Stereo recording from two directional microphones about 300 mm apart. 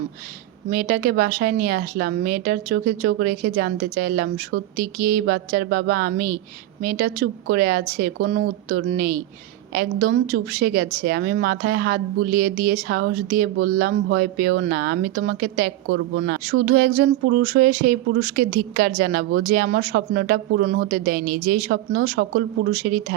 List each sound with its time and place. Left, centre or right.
0.7 s a woman's voice: right